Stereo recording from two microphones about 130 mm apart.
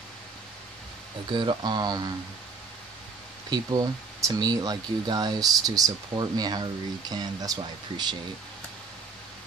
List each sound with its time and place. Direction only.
1.3 s speech: 35° right (ahead or behind)
3.4 s speech: 30° right (ahead or behind)